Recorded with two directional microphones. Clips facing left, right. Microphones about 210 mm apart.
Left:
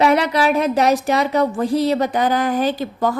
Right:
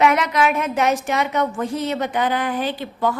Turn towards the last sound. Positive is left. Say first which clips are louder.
# left 3 dB
turn(degrees=40)  # may be behind; listen again after turning